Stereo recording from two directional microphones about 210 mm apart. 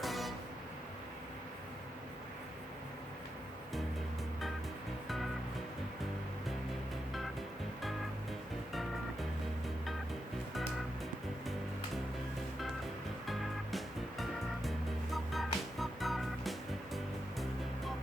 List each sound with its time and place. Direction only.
0.0 s music: centre (ahead or behind)
13.2 s music: centre (ahead or behind)